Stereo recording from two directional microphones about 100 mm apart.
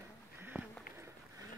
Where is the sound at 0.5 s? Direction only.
Centre (ahead or behind).